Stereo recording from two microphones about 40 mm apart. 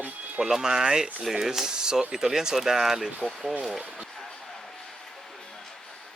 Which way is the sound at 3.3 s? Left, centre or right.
Centre.